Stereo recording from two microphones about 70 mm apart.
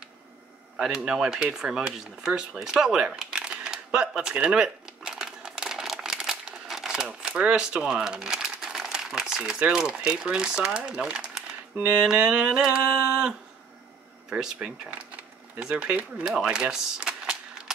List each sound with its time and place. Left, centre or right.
0.7 s speech: centre
14.3 s speech: centre